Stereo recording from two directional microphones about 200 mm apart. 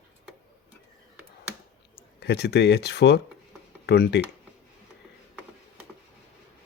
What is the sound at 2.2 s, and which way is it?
Speech, 55° left (ahead or behind).